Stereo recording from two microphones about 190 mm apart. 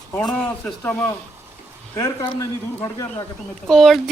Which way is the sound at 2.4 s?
15° left (ahead or behind).